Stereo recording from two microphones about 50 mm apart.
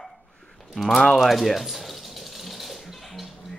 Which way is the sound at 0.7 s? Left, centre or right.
Centre.